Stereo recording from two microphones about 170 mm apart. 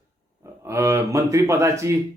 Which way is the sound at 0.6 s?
15° right (ahead or behind).